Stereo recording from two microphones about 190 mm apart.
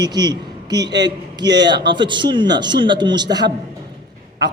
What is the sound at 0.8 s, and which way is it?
Speech, 65° right (ahead or behind).